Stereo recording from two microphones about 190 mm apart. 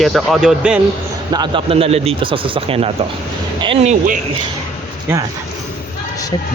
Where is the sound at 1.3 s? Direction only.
25° right (ahead or behind).